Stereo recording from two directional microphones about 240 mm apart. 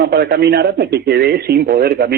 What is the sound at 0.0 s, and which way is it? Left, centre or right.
A man's voice, right.